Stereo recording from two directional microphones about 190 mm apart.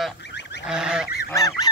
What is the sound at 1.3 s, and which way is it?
Goose, 15° left (ahead or behind).